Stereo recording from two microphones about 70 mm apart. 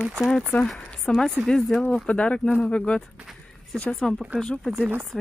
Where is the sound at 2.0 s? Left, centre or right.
Centre.